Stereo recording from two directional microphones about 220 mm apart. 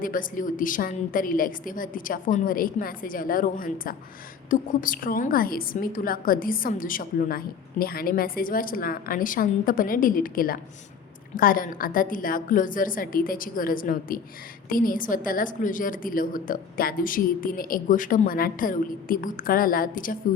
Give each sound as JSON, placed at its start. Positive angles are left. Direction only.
{"t": 0.0, "sound": "a woman's voice", "side_deg": 40}